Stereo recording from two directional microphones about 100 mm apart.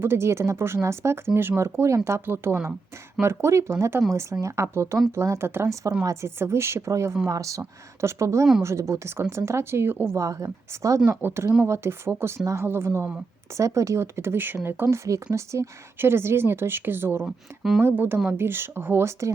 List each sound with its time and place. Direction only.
0.0 s speech: 25° right (ahead or behind)
11.0 s speech: 20° right (ahead or behind)
17.2 s speech: 5° right (ahead or behind)
17.8 s speech: 20° right (ahead or behind)